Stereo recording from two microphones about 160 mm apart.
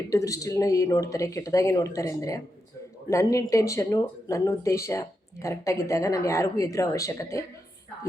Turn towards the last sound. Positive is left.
turn(degrees=20)  # may be behind; listen again after turning